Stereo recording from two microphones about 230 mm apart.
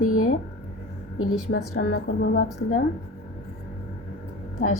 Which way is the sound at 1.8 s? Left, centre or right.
Left.